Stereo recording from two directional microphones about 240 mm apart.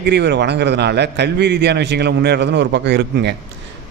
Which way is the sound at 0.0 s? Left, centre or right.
Right.